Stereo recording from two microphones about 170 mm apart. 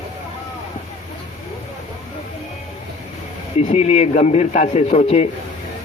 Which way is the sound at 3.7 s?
40° left (ahead or behind).